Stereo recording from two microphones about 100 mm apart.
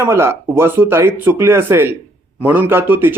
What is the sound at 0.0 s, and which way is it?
Speech, 25° right (ahead or behind).